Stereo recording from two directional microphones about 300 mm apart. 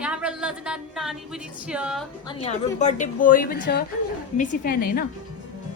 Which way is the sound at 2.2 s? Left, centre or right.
Centre.